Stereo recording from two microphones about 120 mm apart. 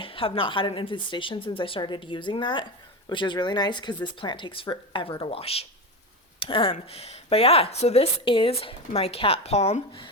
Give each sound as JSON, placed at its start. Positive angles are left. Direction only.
{"t": 0.0, "sound": "a woman's voice", "side_deg": 50}